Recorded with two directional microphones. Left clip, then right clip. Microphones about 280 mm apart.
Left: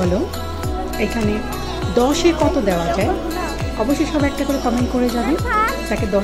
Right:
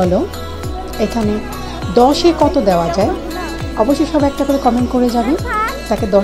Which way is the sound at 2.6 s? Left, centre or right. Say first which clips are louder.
Right 5 dB; centre.